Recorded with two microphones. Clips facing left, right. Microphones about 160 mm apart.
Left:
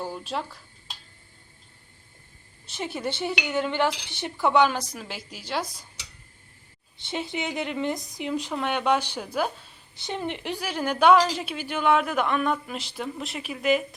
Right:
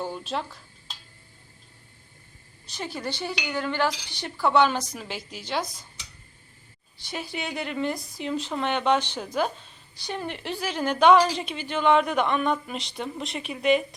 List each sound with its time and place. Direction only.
0.0 s speech: 5° left (ahead or behind)
2.7 s dishes: 20° left (ahead or behind)
4.9 s a woman's voice: 5° left (ahead or behind)
7.0 s dishes: 25° left (ahead or behind)
8.5 s a woman's voice: 10° left (ahead or behind)
9.9 s a woman's voice: 20° left (ahead or behind); by 13.8 s 5° left (ahead or behind)